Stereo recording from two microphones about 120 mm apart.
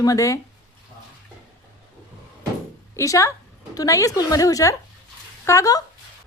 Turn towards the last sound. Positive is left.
turn(degrees=30)  # may be behind; listen again after turning